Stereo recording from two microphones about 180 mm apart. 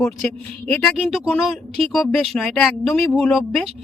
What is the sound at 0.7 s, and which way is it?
Speech, centre (ahead or behind).